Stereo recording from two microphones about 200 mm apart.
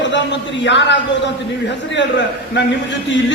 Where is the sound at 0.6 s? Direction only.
60° left (ahead or behind).